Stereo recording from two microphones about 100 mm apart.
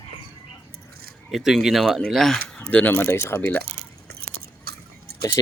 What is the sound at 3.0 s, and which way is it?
Speech, 25° left (ahead or behind).